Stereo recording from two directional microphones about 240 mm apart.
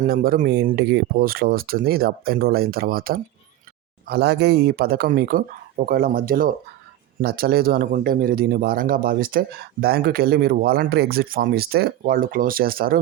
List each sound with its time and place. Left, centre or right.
0.0 s a man's voice: right